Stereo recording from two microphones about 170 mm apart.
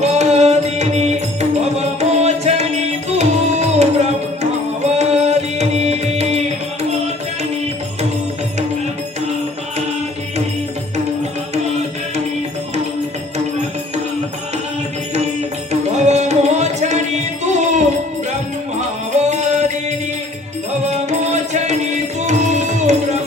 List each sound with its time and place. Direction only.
0.0 s music: 40° right (ahead or behind)
15.7 s music: 40° right (ahead or behind)
19.3 s music: 40° right (ahead or behind)
20.8 s music: 45° right (ahead or behind)